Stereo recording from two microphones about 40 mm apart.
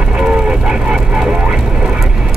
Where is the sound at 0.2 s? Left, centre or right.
Right.